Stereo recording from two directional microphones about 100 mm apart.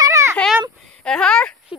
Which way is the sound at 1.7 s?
5° right (ahead or behind).